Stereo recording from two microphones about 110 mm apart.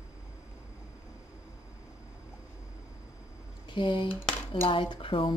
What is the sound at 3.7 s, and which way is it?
A woman's voice, 45° left (ahead or behind).